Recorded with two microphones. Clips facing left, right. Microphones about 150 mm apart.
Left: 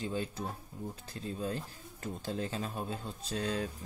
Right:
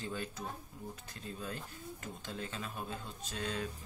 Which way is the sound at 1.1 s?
30° left (ahead or behind).